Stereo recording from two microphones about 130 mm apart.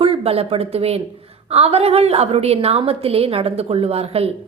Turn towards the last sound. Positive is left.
turn(degrees=-50)  # may be behind; listen again after turning